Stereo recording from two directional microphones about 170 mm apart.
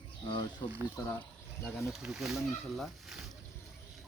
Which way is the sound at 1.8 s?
5° right (ahead or behind).